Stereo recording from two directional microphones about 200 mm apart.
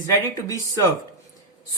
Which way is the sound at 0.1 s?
15° left (ahead or behind).